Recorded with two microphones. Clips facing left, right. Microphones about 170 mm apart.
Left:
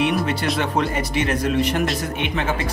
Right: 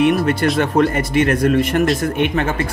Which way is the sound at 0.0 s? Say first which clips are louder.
Right 6 dB; 50° right (ahead or behind).